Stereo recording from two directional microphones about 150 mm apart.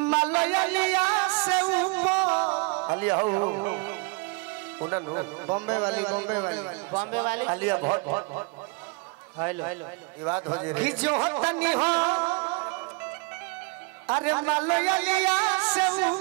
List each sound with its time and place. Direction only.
0.1 s music: 10° right (ahead or behind)
2.4 s music: 25° right (ahead or behind)
4.7 s a man's voice: 25° right (ahead or behind)
12.3 s music: 25° right (ahead or behind)
14.1 s a man's voice: 15° right (ahead or behind)